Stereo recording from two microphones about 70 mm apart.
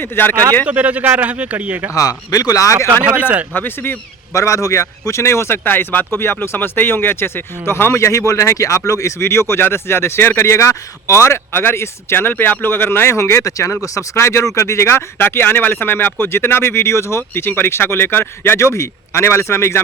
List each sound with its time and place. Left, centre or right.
0.0 s speech: left
0.7 s speech: right
2.0 s speech: left
3.0 s speech: centre
3.5 s speech: left
4.4 s speech: left